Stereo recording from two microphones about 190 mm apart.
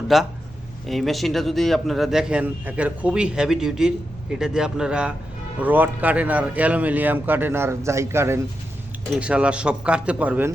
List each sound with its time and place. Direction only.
0.1 s a man's voice: centre (ahead or behind)